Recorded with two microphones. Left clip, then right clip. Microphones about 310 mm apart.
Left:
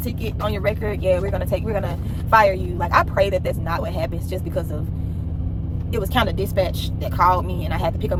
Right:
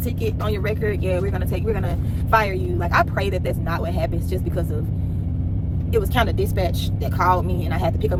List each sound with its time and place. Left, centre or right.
0.0 s speech: centre
5.9 s speech: centre